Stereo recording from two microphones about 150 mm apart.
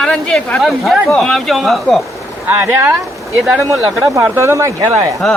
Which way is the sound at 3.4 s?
Centre (ahead or behind).